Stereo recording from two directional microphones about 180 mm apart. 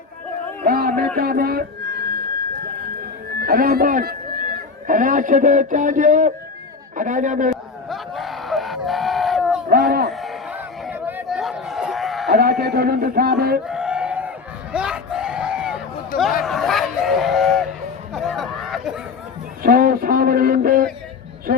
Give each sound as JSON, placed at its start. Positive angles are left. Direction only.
{"t": 0.6, "sound": "a sound", "side_deg": -55}
{"t": 3.4, "sound": "a man's voice", "side_deg": -55}
{"t": 7.5, "sound": "crowd", "side_deg": 0}
{"t": 9.6, "sound": "a sound", "side_deg": -55}
{"t": 10.1, "sound": "chatter", "side_deg": 0}
{"t": 12.3, "sound": "speech", "side_deg": -60}
{"t": 13.7, "sound": "crowd", "side_deg": -5}
{"t": 18.1, "sound": "chatter", "side_deg": 0}
{"t": 19.6, "sound": "a sound", "side_deg": -55}